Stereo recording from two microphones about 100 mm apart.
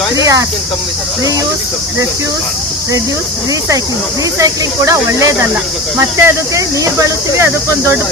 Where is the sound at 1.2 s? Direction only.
35° right (ahead or behind).